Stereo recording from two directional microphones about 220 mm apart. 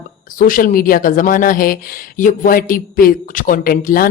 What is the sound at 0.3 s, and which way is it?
Speech, 40° left (ahead or behind).